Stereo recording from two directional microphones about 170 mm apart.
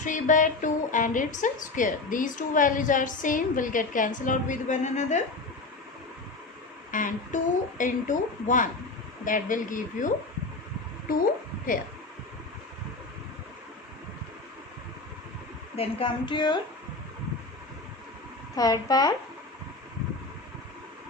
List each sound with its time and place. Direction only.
0.0 s a woman's voice: 50° left (ahead or behind)
6.9 s a woman's voice: 50° left (ahead or behind)
15.7 s a woman's voice: 35° left (ahead or behind)
18.5 s a woman's voice: 20° left (ahead or behind)